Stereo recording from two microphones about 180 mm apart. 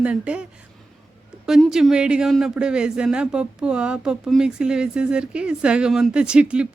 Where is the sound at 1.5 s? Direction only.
5° right (ahead or behind).